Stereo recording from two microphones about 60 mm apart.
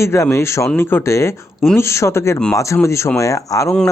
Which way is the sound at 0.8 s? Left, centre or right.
Left.